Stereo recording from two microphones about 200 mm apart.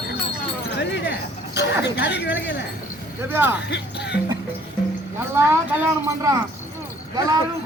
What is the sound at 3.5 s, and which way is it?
Speech, 55° left (ahead or behind).